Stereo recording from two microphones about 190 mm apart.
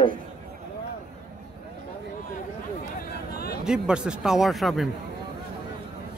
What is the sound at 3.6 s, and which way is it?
Speech, 5° right (ahead or behind).